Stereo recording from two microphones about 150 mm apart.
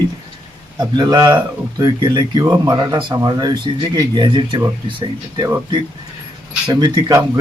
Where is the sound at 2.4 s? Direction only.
20° right (ahead or behind).